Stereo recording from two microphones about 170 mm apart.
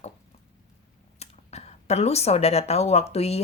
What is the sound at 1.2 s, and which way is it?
Speech, 40° left (ahead or behind).